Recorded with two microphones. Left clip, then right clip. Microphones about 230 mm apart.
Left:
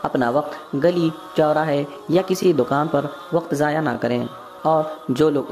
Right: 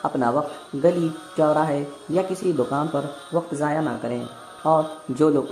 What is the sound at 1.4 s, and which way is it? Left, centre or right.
Speech, left.